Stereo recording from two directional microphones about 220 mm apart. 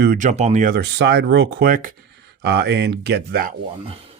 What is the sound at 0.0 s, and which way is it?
Speech, 40° right (ahead or behind).